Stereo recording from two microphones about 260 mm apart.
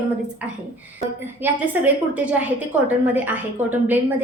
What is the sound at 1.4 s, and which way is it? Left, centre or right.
A woman's voice, centre.